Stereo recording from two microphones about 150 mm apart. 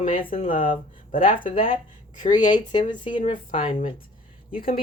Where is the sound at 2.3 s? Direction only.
30° left (ahead or behind).